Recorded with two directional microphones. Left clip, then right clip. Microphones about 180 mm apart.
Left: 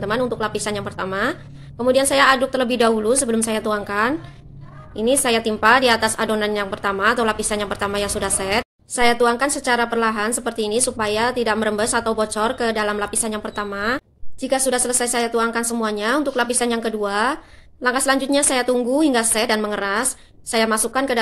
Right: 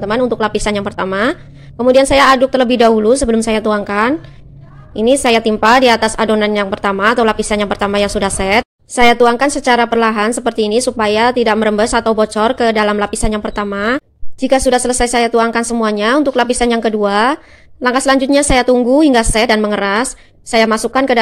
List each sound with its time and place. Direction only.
0.1 s a woman's voice: 40° right (ahead or behind)